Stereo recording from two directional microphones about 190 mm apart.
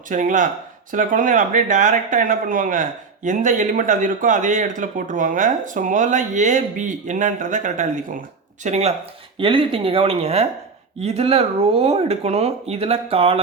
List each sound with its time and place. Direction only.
0.1 s speech: 40° right (ahead or behind)